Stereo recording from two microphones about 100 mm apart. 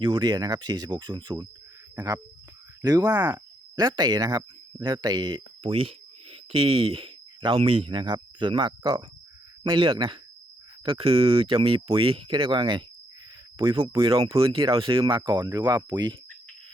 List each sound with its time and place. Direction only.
0.0 s speech: 50° right (ahead or behind)
2.0 s speech: 35° right (ahead or behind)
3.2 s speech: 20° right (ahead or behind)
3.8 s speech: 45° right (ahead or behind)
5.6 s speech: 65° right (ahead or behind)
10.8 s speech: 70° right (ahead or behind)
15.2 s speech: 40° right (ahead or behind)